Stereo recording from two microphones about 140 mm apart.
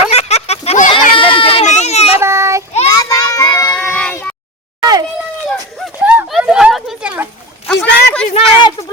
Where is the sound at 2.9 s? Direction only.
25° left (ahead or behind).